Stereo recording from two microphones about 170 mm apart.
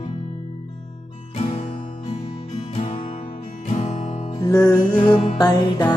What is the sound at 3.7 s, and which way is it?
Music, 45° left (ahead or behind).